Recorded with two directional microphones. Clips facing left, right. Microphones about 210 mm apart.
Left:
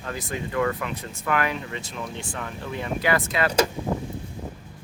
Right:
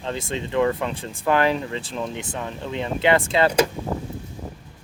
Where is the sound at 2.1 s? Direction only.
20° right (ahead or behind).